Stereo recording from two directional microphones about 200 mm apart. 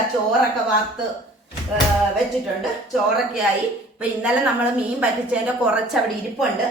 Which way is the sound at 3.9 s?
5° right (ahead or behind).